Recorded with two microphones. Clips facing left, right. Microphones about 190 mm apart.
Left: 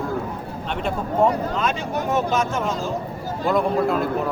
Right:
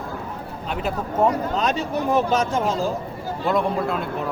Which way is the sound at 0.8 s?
5° right (ahead or behind).